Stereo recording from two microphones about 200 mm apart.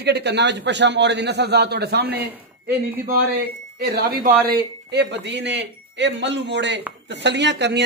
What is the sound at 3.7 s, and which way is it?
Speech, 50° right (ahead or behind).